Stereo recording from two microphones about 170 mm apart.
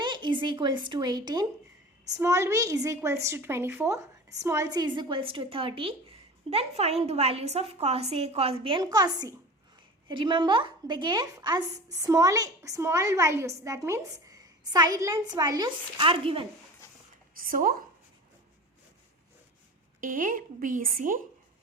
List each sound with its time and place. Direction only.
0.0 s a woman's voice: 25° right (ahead or behind)
17.3 s a woman's voice: 55° right (ahead or behind)
20.0 s a woman's voice: 50° right (ahead or behind)